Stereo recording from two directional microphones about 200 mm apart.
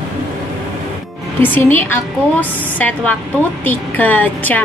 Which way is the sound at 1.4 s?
10° left (ahead or behind).